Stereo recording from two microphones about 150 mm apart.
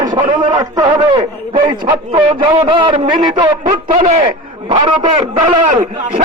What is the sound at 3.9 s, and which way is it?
Speech, 55° right (ahead or behind).